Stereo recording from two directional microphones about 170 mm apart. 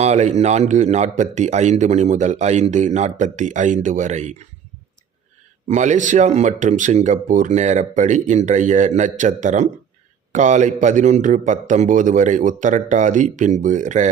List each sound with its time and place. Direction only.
0.0 s a man's voice: 40° right (ahead or behind)
5.6 s a man's voice: 45° right (ahead or behind)